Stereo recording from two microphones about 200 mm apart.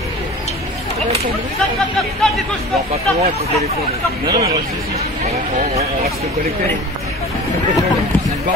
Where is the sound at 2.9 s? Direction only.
30° right (ahead or behind).